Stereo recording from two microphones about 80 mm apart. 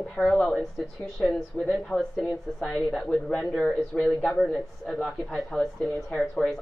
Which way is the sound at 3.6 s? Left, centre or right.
Centre.